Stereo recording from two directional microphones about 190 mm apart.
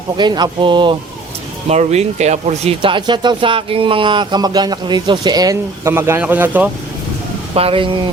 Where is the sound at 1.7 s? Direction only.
35° right (ahead or behind); by 6.7 s 10° right (ahead or behind).